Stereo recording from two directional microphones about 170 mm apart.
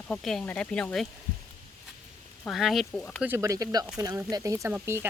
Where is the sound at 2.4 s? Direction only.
Centre (ahead or behind).